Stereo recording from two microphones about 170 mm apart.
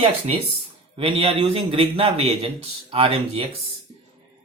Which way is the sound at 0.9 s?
35° right (ahead or behind).